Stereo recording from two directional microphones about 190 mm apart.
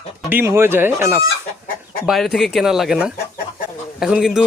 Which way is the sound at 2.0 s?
Centre (ahead or behind).